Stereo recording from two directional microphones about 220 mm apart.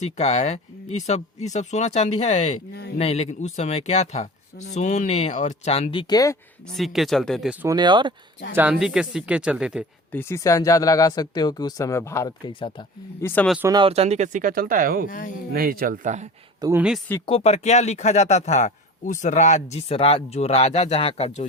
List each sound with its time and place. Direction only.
0.0 s speech: 30° left (ahead or behind)
6.7 s speech: centre (ahead or behind)
7.6 s speech: 15° right (ahead or behind)
8.5 s speech: 5° right (ahead or behind)
10.1 s speech: 10° left (ahead or behind)
13.2 s speech: 5° left (ahead or behind)
13.6 s speech: 15° right (ahead or behind); by 15.0 s 40° right (ahead or behind)
15.0 s speech: 40° left (ahead or behind)
15.5 s speech: 45° right (ahead or behind)
16.6 s speech: 15° right (ahead or behind)
17.2 s speech: 30° left (ahead or behind)